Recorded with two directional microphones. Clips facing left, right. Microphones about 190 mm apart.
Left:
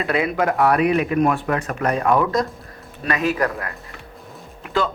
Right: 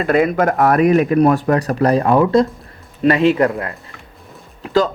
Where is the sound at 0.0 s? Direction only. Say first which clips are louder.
Right 6 dB; 45° right (ahead or behind); by 3.7 s 25° right (ahead or behind).